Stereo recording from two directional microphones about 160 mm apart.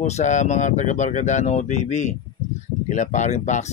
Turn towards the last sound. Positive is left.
turn(degrees=45)  # may be behind; listen again after turning